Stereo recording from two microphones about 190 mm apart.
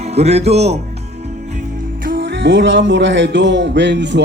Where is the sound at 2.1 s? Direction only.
65° right (ahead or behind).